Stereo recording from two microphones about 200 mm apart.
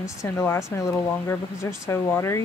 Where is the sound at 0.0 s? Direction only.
15° left (ahead or behind).